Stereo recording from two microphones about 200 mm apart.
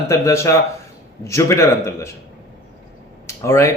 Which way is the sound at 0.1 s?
15° left (ahead or behind).